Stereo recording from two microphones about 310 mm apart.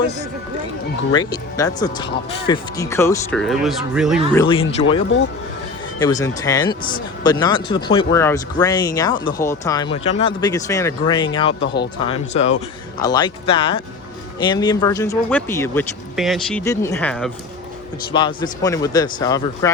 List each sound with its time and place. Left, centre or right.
1.1 s speech: centre
4.8 s speech: centre
18.1 s speech: centre